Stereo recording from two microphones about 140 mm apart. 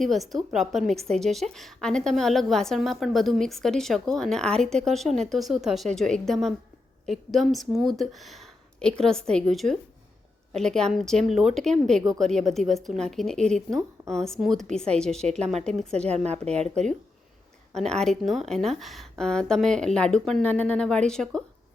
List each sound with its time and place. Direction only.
0.0 s a woman's voice: centre (ahead or behind)
16.5 s speech: 50° right (ahead or behind)
17.7 s a woman's voice: 5° left (ahead or behind)